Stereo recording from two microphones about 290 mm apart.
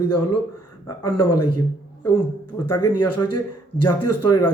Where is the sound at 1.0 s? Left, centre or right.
Left.